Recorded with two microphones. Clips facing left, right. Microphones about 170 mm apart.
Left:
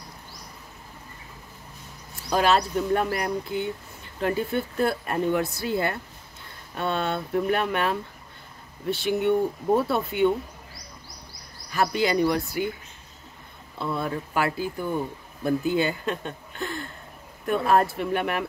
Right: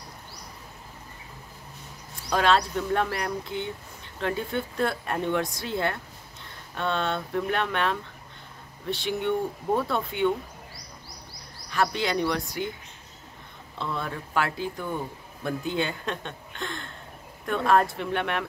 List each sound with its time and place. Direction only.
2.2 s speech: 5° left (ahead or behind)
11.7 s speech: 5° left (ahead or behind)
13.7 s speech: 5° left (ahead or behind)